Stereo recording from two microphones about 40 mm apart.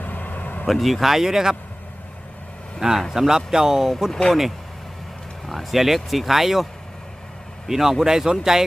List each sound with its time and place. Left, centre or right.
0.0 s vehicle: left
0.7 s speech: centre
2.8 s speech: centre
4.1 s speech: centre
5.5 s speech: centre
7.7 s speech: centre